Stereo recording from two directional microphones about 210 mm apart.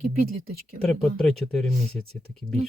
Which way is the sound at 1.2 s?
Centre (ahead or behind).